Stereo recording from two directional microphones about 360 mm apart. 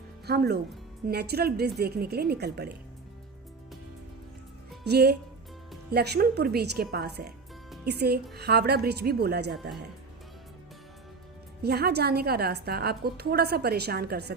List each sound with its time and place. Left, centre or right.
0.3 s a woman's voice: right
4.8 s a woman's voice: right
11.6 s a woman's voice: right